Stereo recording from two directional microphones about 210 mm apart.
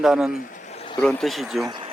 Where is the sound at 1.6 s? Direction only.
20° right (ahead or behind).